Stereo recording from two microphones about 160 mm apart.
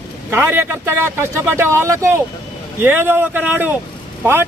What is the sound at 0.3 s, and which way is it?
Speech, 15° right (ahead or behind).